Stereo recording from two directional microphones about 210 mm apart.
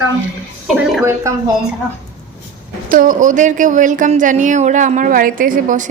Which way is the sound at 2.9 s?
40° right (ahead or behind).